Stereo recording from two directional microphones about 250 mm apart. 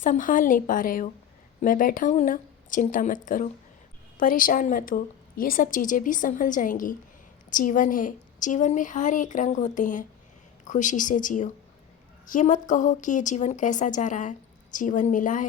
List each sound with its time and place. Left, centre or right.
0.0 s speech: left